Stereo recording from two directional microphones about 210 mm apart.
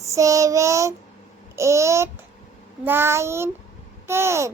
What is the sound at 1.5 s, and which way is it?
Babbling, 15° right (ahead or behind).